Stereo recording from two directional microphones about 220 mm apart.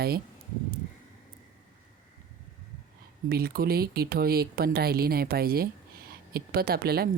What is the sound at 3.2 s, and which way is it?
Speech, 45° right (ahead or behind).